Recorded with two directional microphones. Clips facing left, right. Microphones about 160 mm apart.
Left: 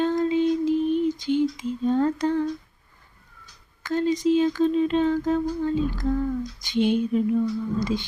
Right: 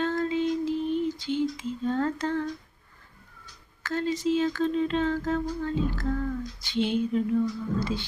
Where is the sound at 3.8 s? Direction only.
15° left (ahead or behind).